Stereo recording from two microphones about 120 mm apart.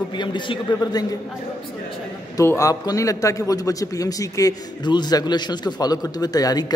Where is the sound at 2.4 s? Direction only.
25° left (ahead or behind).